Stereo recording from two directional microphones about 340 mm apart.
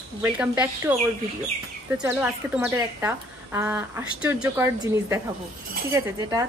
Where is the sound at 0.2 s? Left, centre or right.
Centre.